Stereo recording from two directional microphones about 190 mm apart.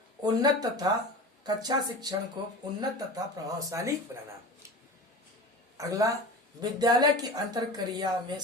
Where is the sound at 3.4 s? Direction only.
15° right (ahead or behind).